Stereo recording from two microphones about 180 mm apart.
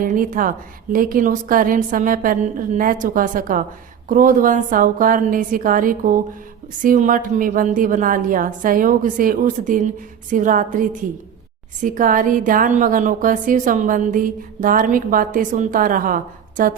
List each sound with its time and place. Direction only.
0.0 s a woman's voice: 50° right (ahead or behind)